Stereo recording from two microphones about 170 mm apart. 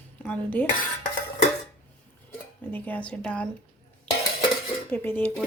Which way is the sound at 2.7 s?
10° left (ahead or behind).